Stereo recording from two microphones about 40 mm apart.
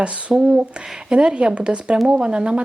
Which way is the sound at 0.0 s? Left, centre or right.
Right.